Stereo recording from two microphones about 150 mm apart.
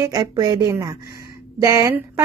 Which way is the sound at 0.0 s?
25° right (ahead or behind).